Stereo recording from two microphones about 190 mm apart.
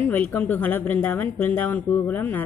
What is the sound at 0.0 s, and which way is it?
A woman's voice, 10° left (ahead or behind).